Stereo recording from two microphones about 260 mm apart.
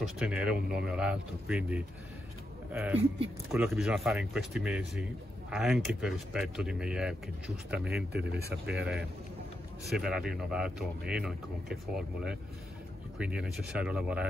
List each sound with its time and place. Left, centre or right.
0.0 s speech: centre
7.9 s speech: right
9.8 s speech: centre